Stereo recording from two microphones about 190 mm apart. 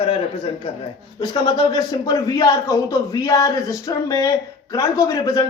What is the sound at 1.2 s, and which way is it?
A man's voice, 25° left (ahead or behind).